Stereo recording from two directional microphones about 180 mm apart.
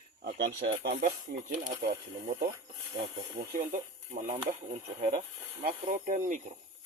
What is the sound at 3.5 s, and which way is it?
Speech, 45° right (ahead or behind).